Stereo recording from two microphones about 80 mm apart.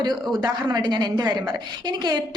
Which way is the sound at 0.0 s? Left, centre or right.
Right.